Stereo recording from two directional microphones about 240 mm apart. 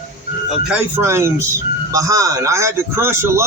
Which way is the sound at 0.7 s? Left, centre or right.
Centre.